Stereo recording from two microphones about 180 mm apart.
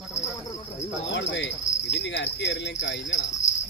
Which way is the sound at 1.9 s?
75° left (ahead or behind).